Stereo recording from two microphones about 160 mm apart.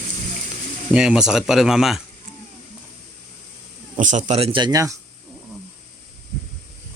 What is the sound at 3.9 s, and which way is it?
Speech, 50° right (ahead or behind).